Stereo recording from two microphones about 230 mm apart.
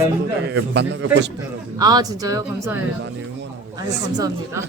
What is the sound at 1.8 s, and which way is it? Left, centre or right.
Speech, centre.